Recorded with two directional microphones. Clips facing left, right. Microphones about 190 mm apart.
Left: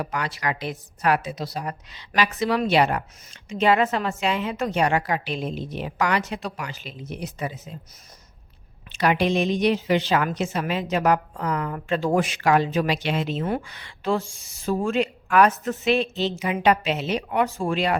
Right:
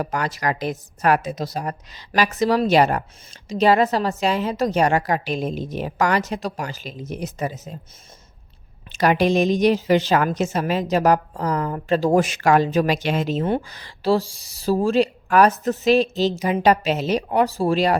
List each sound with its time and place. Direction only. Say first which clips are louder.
0.0 s a woman's voice: right 4 dB; 45° right (ahead or behind)
8.9 s a woman's voice: right 3 dB; 40° right (ahead or behind)